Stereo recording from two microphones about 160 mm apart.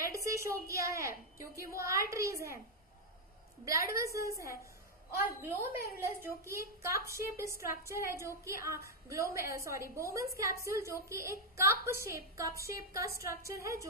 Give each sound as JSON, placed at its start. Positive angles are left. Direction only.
{"t": 0.0, "sound": "a woman's voice", "side_deg": -20}
{"t": 3.6, "sound": "a woman's voice", "side_deg": -20}